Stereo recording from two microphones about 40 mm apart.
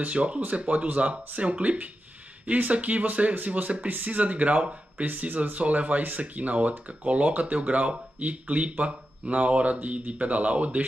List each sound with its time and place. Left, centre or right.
0.0 s speech: right